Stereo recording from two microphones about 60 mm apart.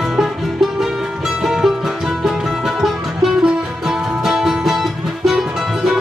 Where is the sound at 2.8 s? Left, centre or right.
Centre.